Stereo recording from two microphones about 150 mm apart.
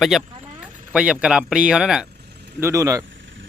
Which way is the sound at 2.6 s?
20° right (ahead or behind).